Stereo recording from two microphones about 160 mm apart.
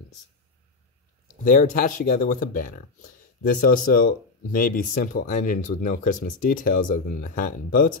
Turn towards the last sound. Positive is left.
turn(degrees=60)  # may be behind; listen again after turning